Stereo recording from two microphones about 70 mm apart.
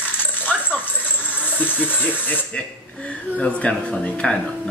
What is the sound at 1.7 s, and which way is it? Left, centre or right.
Speech, centre.